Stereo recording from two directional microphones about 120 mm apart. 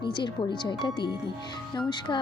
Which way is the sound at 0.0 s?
40° left (ahead or behind).